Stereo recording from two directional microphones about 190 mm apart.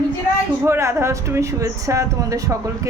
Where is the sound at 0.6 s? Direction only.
15° right (ahead or behind).